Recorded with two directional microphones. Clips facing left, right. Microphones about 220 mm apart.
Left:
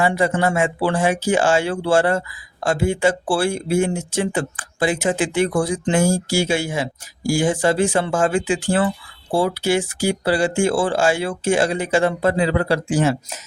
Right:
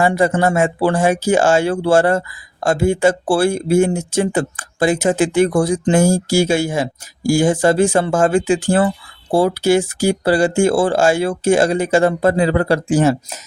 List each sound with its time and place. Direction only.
0.0 s speech: 45° right (ahead or behind)